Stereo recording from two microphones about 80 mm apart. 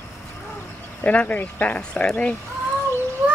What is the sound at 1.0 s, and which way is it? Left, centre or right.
Speech, centre.